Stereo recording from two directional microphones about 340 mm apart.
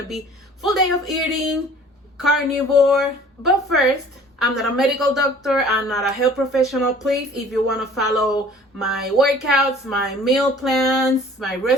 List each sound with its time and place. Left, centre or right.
0.6 s speech: centre
2.7 s speech: centre